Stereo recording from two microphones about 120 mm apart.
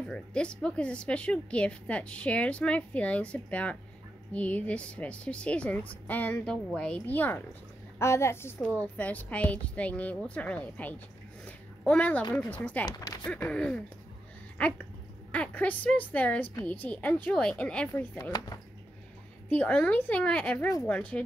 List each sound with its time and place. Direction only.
0.0 s a woman's voice: 10° left (ahead or behind)
12.8 s speech: 35° left (ahead or behind)
13.2 s a woman's voice: 10° left (ahead or behind)
15.3 s a woman's voice: 10° left (ahead or behind)
19.5 s a woman's voice: 10° left (ahead or behind)